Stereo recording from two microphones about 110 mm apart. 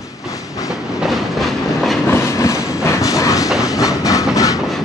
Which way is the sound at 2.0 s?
25° left (ahead or behind).